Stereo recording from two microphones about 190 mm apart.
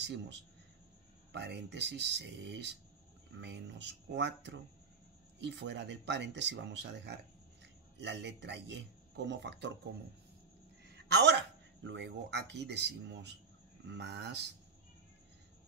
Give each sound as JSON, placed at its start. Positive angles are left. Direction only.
{"t": 0.0, "sound": "a man's voice", "side_deg": -65}
{"t": 11.1, "sound": "speech", "side_deg": -65}